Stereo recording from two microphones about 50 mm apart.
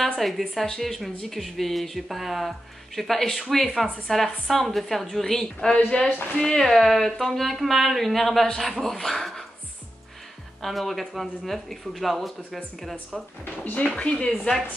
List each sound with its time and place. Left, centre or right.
0.2 s speech: centre
6.0 s speech: left
6.4 s speech: centre
10.6 s speech: centre
13.7 s speech: left